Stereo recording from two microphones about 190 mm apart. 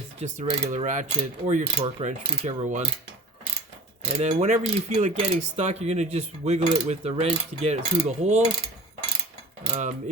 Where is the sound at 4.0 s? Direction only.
35° right (ahead or behind).